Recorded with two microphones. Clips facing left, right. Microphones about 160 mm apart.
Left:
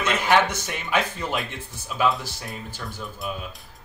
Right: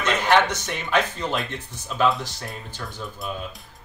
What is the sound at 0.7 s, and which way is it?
Speech, 10° left (ahead or behind).